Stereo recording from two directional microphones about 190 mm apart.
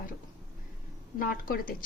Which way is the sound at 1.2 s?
50° left (ahead or behind).